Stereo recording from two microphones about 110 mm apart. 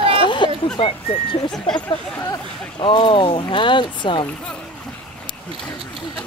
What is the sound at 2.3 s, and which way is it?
Speech, 45° left (ahead or behind).